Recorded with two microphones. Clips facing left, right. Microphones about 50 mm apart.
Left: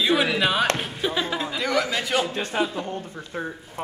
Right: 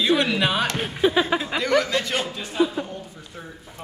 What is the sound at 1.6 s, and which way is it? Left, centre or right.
Speech, centre.